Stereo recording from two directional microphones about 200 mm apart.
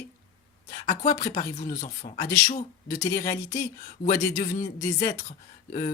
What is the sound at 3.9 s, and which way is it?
Speech, 40° left (ahead or behind).